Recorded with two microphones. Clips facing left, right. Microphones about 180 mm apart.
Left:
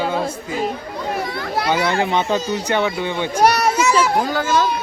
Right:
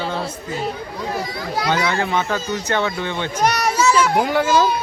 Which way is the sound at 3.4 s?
30° left (ahead or behind).